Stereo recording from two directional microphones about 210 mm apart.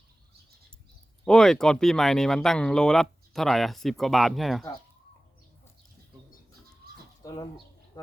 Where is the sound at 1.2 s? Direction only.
5° left (ahead or behind).